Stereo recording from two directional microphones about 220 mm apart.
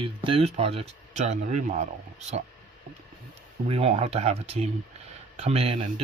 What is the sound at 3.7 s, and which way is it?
Speech, 25° right (ahead or behind).